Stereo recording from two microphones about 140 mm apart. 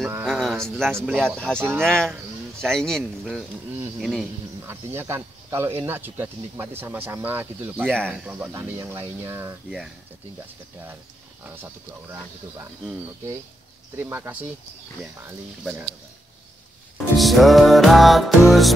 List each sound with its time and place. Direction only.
0.2 s a sound: centre (ahead or behind)
0.7 s music: 5° left (ahead or behind)
1.6 s speech: 15° right (ahead or behind)
1.9 s music: 5° left (ahead or behind)
4.0 s a man's voice: centre (ahead or behind)
4.6 s speech: 15° right (ahead or behind)
7.8 s speech: 5° left (ahead or behind)
8.1 s speech: 10° right (ahead or behind)
11.4 s speech: 15° right (ahead or behind)
13.9 s speech: 15° right (ahead or behind)
17.2 s music: centre (ahead or behind)